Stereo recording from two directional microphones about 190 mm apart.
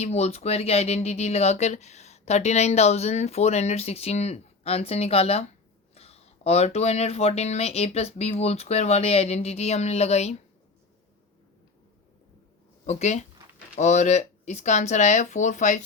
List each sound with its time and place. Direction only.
0.0 s speech: 35° left (ahead or behind)
12.8 s speech: 35° left (ahead or behind)